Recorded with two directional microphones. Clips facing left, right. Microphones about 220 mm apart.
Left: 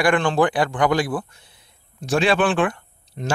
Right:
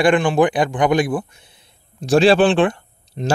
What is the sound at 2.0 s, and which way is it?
Speech, 35° right (ahead or behind).